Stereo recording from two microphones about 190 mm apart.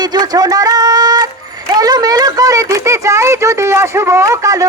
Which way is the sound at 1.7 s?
20° right (ahead or behind).